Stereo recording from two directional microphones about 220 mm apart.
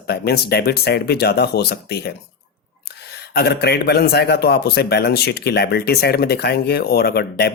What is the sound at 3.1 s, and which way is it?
Speech, 45° left (ahead or behind).